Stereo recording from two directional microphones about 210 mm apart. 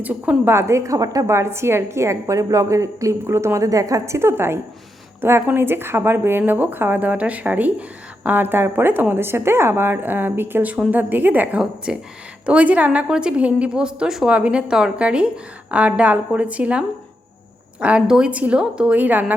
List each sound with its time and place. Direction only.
0.0 s a woman's voice: 5° right (ahead or behind)